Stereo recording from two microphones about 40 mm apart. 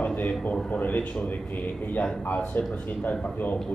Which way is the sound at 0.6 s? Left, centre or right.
Left.